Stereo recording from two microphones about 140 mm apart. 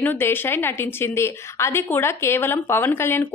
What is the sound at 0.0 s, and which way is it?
A woman's voice, 15° left (ahead or behind).